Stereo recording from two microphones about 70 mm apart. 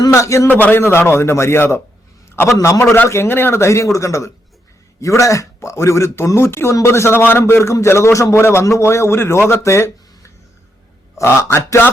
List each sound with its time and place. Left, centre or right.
0.1 s speech: left
0.4 s a man's voice: left